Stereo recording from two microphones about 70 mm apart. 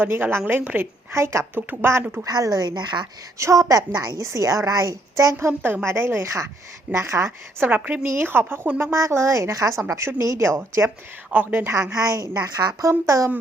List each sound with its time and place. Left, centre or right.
0.0 s a woman's voice: right
1.1 s a woman's voice: right
2.2 s a woman's voice: right
3.3 s a woman's voice: right
6.9 s a woman's voice: right
7.7 s a woman's voice: right
8.0 s a woman's voice: right
8.8 s a woman's voice: right
11.3 s a woman's voice: right
11.7 s a woman's voice: right